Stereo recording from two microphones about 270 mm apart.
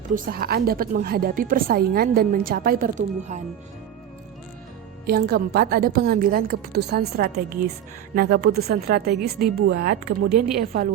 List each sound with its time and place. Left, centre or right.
0.1 s a woman's voice: right
5.0 s a woman's voice: right